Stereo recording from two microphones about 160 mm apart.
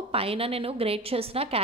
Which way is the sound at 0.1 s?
35° right (ahead or behind).